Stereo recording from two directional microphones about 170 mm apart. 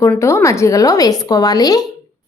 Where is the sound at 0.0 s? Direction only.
15° left (ahead or behind).